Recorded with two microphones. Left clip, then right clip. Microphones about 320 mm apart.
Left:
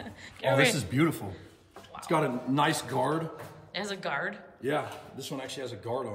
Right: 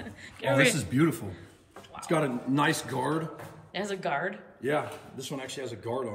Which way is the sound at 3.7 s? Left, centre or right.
Centre.